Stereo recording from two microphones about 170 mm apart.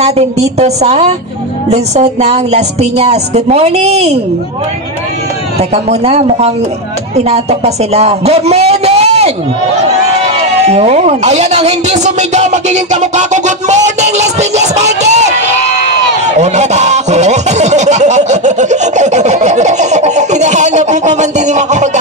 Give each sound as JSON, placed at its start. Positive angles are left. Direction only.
{"t": 0.0, "sound": "a woman's voice", "side_deg": -40}
{"t": 5.6, "sound": "a woman's voice", "side_deg": -40}
{"t": 10.7, "sound": "speech", "side_deg": -40}
{"t": 16.3, "sound": "a sound", "side_deg": -45}